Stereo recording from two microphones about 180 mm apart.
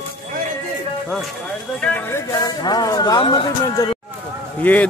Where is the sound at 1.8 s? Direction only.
10° left (ahead or behind); by 4.0 s 25° left (ahead or behind).